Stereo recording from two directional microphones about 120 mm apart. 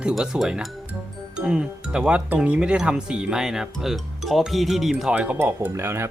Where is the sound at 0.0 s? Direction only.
5° right (ahead or behind); by 6.1 s 20° right (ahead or behind).